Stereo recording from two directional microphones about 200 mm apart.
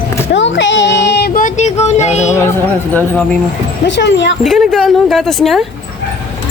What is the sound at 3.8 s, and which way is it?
Speech, 65° left (ahead or behind).